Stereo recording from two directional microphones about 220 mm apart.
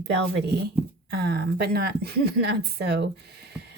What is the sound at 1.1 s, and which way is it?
Speech, 45° right (ahead or behind).